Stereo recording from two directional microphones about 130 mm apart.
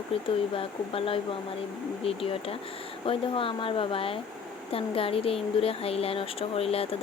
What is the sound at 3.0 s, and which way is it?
Speech, 45° left (ahead or behind).